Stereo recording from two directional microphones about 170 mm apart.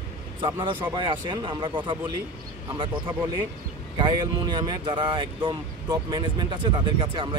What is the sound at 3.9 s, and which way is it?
Speech, 25° right (ahead or behind).